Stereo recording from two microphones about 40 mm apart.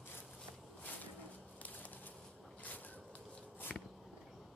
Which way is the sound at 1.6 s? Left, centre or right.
Left.